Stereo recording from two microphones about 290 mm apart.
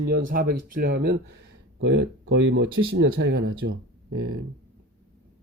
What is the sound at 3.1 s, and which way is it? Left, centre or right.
Speech, right.